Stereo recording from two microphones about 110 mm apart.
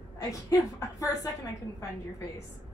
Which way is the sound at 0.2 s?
35° left (ahead or behind).